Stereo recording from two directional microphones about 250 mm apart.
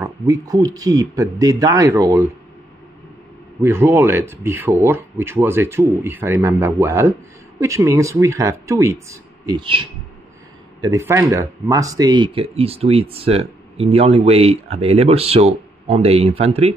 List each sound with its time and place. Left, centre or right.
0.0 s speech: centre
3.6 s speech: centre